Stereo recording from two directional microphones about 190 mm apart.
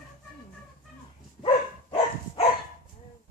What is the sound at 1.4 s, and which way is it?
Dog, 30° left (ahead or behind).